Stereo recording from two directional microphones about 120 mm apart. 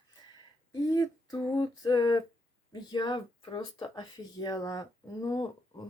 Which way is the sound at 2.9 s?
40° left (ahead or behind).